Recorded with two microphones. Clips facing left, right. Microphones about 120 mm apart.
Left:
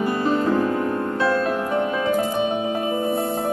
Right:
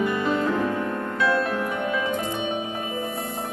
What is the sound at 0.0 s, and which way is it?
Music, 35° left (ahead or behind).